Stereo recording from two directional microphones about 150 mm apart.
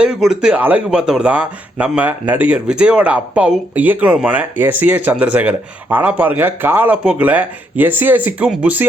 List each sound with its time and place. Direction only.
0.0 s speech: 5° right (ahead or behind)